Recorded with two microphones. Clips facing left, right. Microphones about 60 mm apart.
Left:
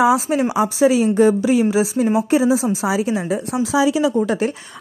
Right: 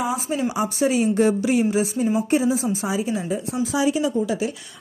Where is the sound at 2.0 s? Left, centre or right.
Left.